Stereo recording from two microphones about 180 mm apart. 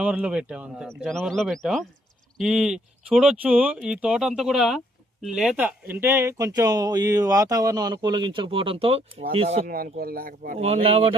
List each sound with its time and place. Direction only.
0.0 s speech: 5° right (ahead or behind); by 9.6 s 30° right (ahead or behind)
9.6 s speech: 55° right (ahead or behind)
10.6 s speech: 35° right (ahead or behind)